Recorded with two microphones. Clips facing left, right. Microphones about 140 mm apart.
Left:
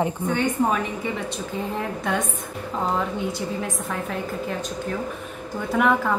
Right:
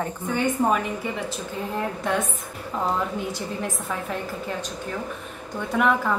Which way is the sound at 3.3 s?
Centre (ahead or behind).